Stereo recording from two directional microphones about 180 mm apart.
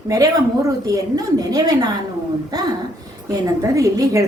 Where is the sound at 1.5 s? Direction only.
20° right (ahead or behind).